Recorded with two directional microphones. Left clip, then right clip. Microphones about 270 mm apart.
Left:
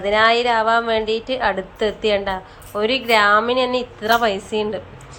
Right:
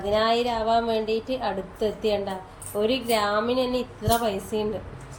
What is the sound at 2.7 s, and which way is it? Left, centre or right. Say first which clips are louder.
Speech: left 6 dB; left.